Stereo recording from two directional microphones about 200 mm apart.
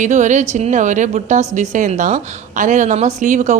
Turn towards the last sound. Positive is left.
turn(degrees=-35)  # may be behind; listen again after turning